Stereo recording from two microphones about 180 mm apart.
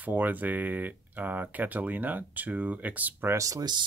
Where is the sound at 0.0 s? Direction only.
10° right (ahead or behind).